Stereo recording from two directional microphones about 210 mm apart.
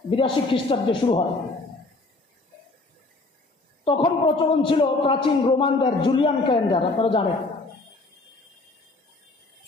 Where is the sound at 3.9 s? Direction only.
25° left (ahead or behind).